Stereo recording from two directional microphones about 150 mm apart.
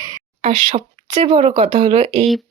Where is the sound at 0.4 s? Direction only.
40° right (ahead or behind).